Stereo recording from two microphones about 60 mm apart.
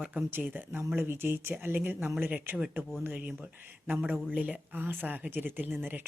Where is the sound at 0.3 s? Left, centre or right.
Right.